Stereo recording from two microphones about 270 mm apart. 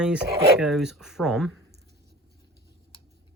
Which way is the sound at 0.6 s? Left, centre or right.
Centre.